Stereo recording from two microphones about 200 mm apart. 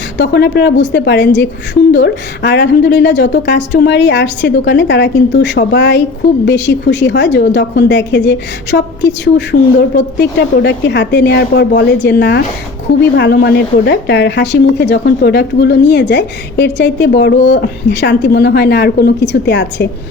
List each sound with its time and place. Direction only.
0.2 s a woman's voice: 60° left (ahead or behind)